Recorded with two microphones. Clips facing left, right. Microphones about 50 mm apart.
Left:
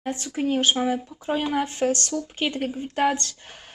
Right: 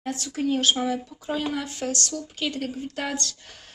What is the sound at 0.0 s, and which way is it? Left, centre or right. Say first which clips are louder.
Speech: left 1 dB; left.